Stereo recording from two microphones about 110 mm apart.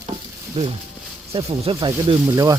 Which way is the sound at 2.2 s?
30° right (ahead or behind).